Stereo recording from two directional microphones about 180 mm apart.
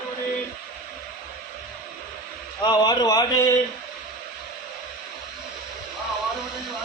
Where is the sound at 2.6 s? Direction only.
25° left (ahead or behind).